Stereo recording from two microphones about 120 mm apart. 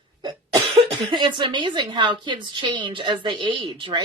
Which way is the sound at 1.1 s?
40° right (ahead or behind).